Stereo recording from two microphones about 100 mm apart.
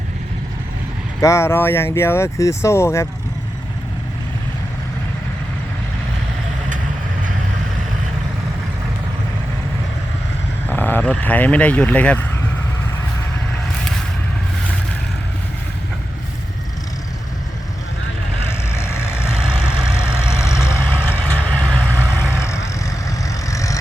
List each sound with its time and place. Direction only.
1.2 s speech: 30° left (ahead or behind)
10.7 s speech: 20° left (ahead or behind)
18.7 s vehicle: 25° left (ahead or behind)
19.4 s vehicle: 10° right (ahead or behind)
20.3 s vehicle: 30° left (ahead or behind)